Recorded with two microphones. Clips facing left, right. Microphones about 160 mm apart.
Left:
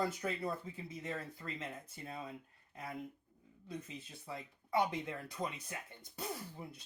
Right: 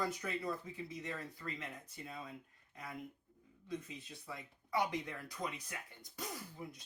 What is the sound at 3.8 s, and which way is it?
Speech, 25° left (ahead or behind).